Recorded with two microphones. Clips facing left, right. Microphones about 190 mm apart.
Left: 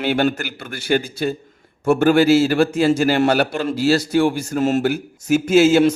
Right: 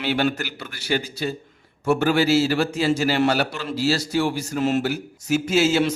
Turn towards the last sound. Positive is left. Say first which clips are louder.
# left 6 dB
turn(degrees=50)  # may be behind; listen again after turning